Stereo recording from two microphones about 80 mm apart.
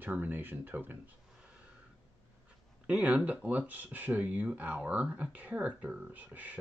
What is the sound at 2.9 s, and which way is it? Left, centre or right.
Speech, centre.